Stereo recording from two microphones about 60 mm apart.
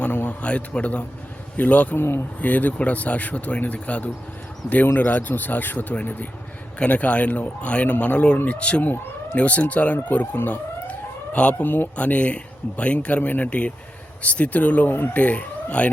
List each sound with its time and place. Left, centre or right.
0.0 s a sound: left
0.4 s speech: left
2.0 s speech: left
2.4 s speech: left
10.3 s police car: left
11.3 s speech: left
11.6 s speech: left
11.9 s speech: left